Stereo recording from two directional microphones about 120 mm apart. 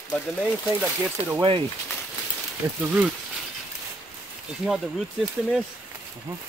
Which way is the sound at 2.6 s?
15° right (ahead or behind).